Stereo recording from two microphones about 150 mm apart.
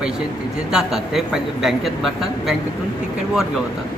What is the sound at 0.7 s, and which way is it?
A man's voice, centre (ahead or behind).